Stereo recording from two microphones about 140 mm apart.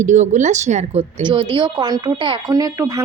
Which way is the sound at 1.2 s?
35° right (ahead or behind).